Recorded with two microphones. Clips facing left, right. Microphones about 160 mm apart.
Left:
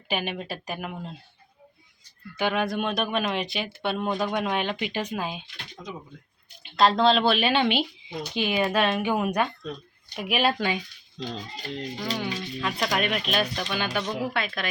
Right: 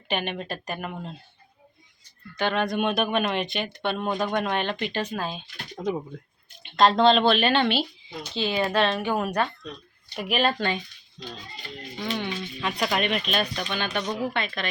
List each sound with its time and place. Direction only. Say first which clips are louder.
0.1 s speech: right 1 dB; 5° left (ahead or behind)
2.3 s speech: right 1 dB; 10° left (ahead or behind)
5.8 s speech: right 11 dB; 55° right (ahead or behind)
6.6 s speech: right 2 dB; centre (ahead or behind)
11.9 s speech: right 3 dB; centre (ahead or behind)